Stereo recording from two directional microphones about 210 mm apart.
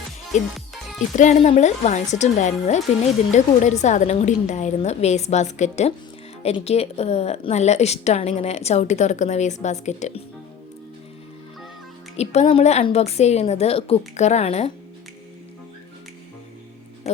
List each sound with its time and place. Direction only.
0.5 s music: centre (ahead or behind)
1.1 s a woman's voice: 35° left (ahead or behind)
12.1 s a woman's voice: 30° left (ahead or behind)